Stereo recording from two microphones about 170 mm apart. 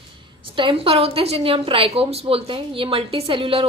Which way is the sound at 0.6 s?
30° right (ahead or behind).